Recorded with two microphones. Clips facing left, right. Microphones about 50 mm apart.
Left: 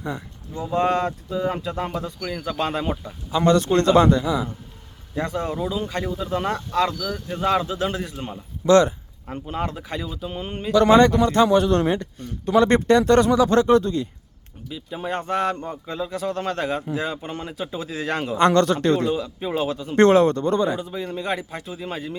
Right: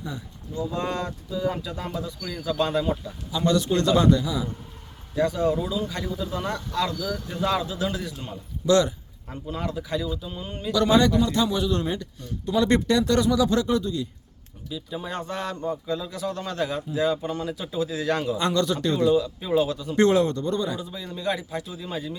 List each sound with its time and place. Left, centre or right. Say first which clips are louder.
0.0 s speech: left 5 dB; left
11.4 s speech: left 7 dB; left
14.7 s speech: left 4 dB; left
19.1 s speech: right 3 dB; left